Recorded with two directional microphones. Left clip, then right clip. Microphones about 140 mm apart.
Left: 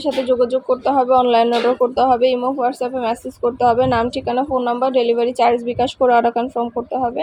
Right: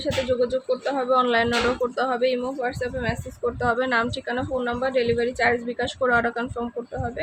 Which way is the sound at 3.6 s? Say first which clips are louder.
Left 7 dB; 25° left (ahead or behind).